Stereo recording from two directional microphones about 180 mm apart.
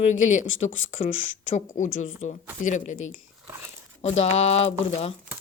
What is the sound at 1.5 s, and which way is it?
A woman's voice, 45° left (ahead or behind).